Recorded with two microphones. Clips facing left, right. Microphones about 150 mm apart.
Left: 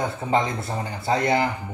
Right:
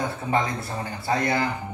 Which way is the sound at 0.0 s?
20° left (ahead or behind).